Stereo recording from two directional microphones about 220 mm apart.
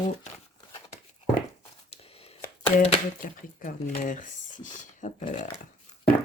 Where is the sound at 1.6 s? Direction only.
25° left (ahead or behind).